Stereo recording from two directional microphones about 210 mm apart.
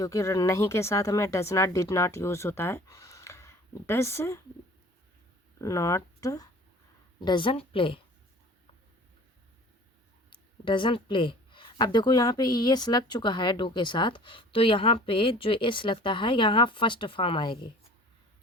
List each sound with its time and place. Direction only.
0.0 s speech: 15° left (ahead or behind)
5.5 s speech: 15° left (ahead or behind)
10.2 s speech: 25° left (ahead or behind)